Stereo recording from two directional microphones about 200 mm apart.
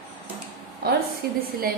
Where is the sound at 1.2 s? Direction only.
50° right (ahead or behind).